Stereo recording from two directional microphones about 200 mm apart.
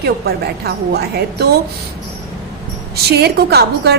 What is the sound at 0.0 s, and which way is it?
A woman's voice, 55° right (ahead or behind).